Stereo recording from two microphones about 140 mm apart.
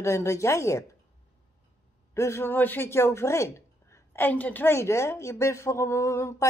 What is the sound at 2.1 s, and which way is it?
Speech, 20° left (ahead or behind).